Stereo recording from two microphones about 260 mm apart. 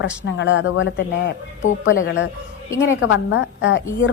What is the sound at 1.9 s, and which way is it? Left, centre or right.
A woman's voice, left.